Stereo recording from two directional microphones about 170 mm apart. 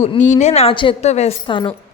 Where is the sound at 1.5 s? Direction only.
30° left (ahead or behind).